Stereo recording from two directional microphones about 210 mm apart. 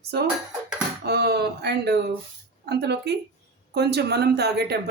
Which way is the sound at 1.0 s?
50° right (ahead or behind).